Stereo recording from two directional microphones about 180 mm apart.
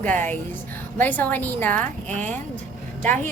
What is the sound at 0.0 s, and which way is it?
A woman's voice, 10° left (ahead or behind).